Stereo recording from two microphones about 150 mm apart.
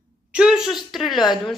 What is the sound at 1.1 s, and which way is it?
Speech, 30° left (ahead or behind).